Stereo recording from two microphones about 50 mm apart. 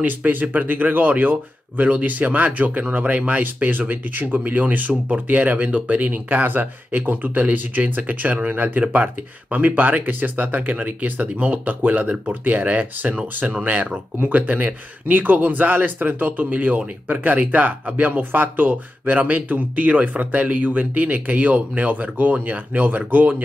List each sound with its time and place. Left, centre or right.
0.0 s speech: right